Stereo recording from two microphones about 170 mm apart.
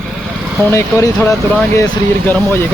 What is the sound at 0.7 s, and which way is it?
Speech, 15° left (ahead or behind).